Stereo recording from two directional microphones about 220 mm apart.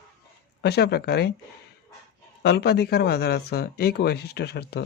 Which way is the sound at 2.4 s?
50° left (ahead or behind).